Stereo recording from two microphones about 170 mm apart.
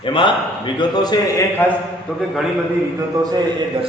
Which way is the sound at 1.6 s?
15° left (ahead or behind).